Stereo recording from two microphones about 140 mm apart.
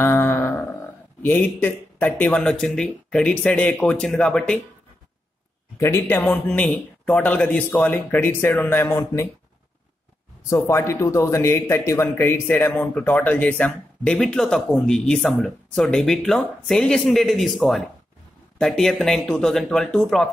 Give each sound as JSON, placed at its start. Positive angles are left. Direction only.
{"t": 0.0, "sound": "a sound", "side_deg": 15}
{"t": 1.2, "sound": "speech", "side_deg": 10}
{"t": 5.8, "sound": "speech", "side_deg": 15}
{"t": 10.5, "sound": "a man's voice", "side_deg": 20}